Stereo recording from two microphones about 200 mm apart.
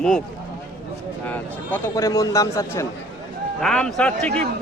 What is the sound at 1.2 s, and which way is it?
A man's voice, 10° left (ahead or behind).